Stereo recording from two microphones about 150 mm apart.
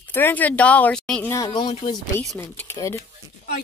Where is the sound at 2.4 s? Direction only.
15° left (ahead or behind).